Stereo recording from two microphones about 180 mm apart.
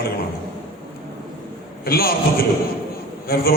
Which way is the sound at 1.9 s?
55° left (ahead or behind).